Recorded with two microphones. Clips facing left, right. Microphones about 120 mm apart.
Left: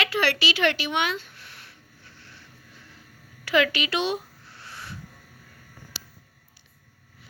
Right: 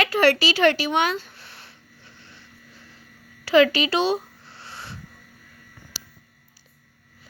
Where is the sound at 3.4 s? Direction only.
30° right (ahead or behind).